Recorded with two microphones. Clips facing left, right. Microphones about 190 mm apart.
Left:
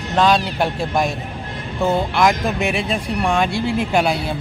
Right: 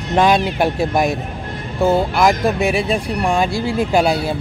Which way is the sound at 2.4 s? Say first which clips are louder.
Right 4 dB; 35° right (ahead or behind).